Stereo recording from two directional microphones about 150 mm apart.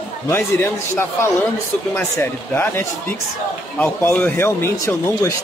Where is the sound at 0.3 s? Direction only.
15° left (ahead or behind).